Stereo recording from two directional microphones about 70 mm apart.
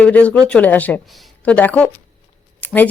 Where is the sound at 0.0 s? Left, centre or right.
Centre.